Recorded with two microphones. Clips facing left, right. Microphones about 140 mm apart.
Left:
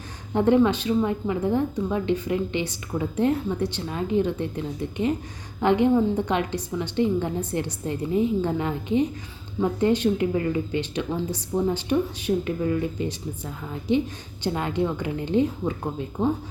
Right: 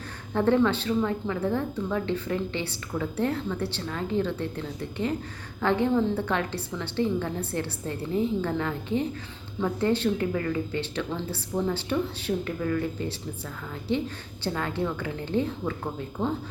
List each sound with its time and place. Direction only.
0.3 s a woman's voice: 15° left (ahead or behind)